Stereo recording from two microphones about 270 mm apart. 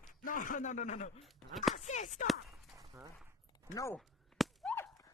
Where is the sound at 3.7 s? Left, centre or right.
Centre.